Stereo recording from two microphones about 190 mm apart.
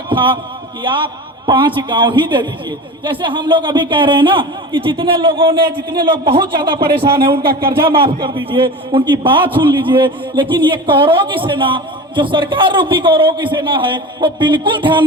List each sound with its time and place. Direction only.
0.1 s a man's voice: 25° right (ahead or behind)